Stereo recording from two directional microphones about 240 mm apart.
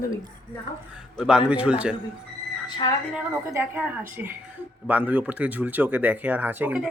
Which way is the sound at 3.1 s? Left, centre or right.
Centre.